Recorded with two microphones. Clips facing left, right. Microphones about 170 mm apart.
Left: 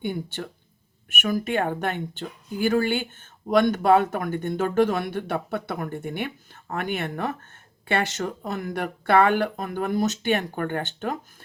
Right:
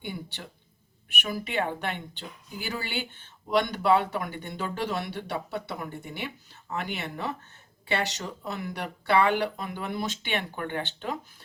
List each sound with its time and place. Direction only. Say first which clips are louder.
0.0 s speech: left 8 dB; 50° left (ahead or behind)